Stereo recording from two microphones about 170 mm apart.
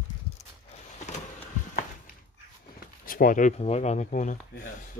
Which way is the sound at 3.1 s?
55° left (ahead or behind).